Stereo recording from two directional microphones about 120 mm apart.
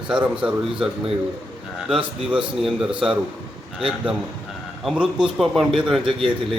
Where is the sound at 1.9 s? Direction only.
5° right (ahead or behind).